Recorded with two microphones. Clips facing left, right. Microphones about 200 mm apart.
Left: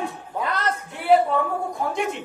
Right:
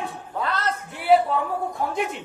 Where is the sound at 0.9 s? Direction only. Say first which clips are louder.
Even; centre (ahead or behind).